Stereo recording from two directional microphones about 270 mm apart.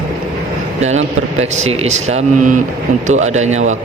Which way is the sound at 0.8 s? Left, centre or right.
Right.